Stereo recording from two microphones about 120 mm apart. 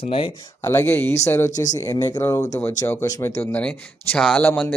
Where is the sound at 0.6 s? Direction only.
20° left (ahead or behind).